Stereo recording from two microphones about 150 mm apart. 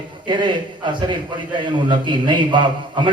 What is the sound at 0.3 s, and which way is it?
A man's voice, 30° right (ahead or behind).